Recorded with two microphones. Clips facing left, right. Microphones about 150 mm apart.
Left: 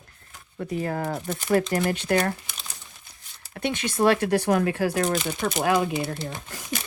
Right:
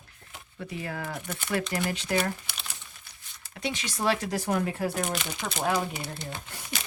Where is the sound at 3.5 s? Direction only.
55° left (ahead or behind); by 5.1 s 85° left.